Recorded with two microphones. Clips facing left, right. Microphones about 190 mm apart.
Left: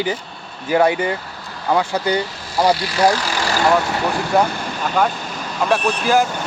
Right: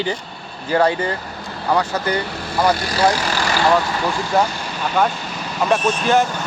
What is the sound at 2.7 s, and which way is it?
Speech, 45° right (ahead or behind).